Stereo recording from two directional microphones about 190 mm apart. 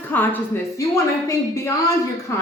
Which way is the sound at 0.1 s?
10° left (ahead or behind).